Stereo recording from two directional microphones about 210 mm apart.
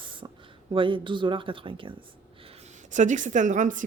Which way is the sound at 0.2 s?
20° right (ahead or behind).